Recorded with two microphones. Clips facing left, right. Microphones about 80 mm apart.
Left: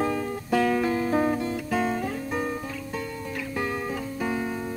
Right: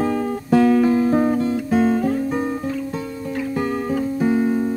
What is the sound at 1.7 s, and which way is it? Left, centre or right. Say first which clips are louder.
Guitar: right 9 dB; right.